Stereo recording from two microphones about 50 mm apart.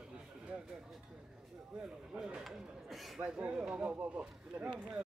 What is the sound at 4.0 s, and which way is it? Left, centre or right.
Speech, right.